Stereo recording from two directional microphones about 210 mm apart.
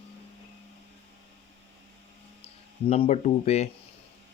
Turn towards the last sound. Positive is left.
turn(degrees=30)  # may be behind; listen again after turning